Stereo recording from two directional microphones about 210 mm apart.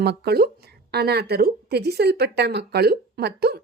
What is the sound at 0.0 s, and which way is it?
Speech, 50° right (ahead or behind).